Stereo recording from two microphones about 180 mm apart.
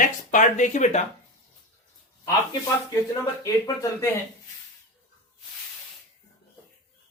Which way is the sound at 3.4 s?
20° left (ahead or behind).